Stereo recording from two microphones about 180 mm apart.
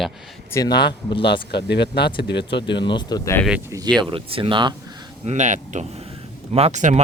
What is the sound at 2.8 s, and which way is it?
Speech, 25° left (ahead or behind).